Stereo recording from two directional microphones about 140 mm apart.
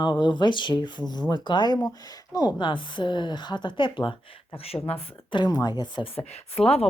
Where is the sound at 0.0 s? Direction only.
30° left (ahead or behind).